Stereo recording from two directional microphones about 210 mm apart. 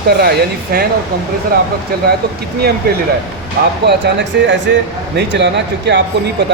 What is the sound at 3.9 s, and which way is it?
Speech, 55° right (ahead or behind).